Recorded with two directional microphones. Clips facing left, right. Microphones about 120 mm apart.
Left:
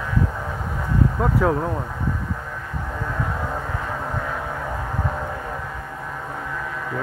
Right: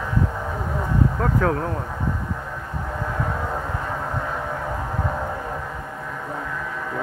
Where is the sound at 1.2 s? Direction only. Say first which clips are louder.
Left 1 dB; 15° left (ahead or behind).